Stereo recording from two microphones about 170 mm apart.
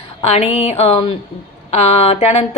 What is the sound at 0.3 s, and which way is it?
A woman's voice, 40° left (ahead or behind).